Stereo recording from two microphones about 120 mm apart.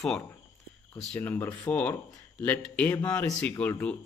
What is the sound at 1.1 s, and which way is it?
Speech, 15° left (ahead or behind).